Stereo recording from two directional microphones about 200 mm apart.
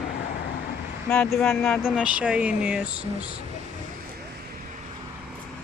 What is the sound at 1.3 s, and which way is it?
Speech, centre (ahead or behind).